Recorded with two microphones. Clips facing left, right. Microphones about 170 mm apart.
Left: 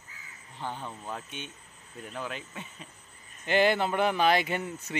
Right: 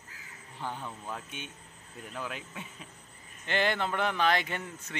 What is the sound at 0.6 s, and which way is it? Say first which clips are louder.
Speech: left 1 dB; 20° left (ahead or behind).